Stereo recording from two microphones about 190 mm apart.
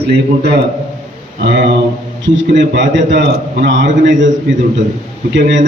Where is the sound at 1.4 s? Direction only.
70° right (ahead or behind).